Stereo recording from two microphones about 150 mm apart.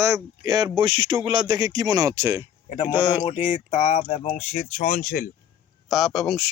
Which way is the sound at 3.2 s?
40° left (ahead or behind).